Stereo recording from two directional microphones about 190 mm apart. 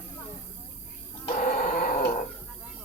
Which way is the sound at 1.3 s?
45° left (ahead or behind).